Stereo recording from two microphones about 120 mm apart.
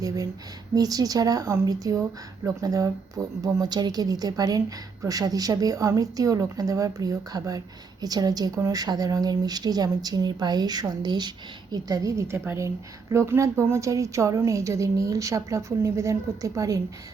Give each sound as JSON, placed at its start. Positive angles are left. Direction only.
{"t": 0.0, "sound": "a woman's voice", "side_deg": -30}